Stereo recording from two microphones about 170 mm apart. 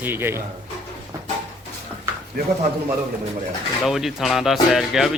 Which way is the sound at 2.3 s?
60° right (ahead or behind).